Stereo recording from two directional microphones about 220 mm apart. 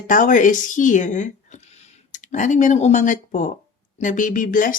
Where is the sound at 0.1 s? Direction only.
35° left (ahead or behind).